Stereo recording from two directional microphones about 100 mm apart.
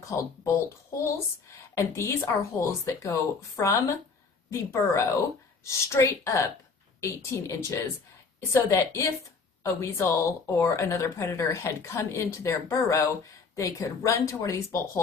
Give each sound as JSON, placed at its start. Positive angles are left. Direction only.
{"t": 0.0, "sound": "speech", "side_deg": 30}
{"t": 2.0, "sound": "a woman's voice", "side_deg": 30}